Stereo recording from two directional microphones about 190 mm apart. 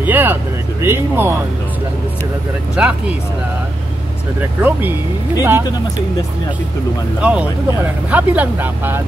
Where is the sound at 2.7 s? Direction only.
5° right (ahead or behind).